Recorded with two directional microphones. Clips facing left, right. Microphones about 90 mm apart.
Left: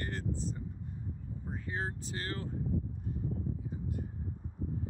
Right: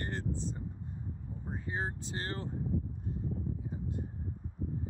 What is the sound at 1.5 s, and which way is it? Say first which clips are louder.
Speech: right 1 dB; 25° right (ahead or behind).